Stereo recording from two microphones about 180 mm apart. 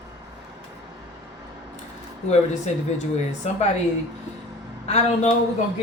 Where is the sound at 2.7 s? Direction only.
40° left (ahead or behind).